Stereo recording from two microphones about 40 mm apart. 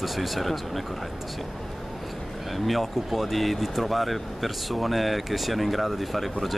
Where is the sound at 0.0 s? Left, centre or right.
Centre.